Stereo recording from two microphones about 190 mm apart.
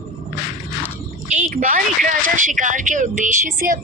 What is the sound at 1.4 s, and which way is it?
A woman's voice, 45° right (ahead or behind).